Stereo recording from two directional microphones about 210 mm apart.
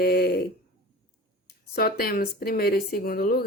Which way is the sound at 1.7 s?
45° left (ahead or behind).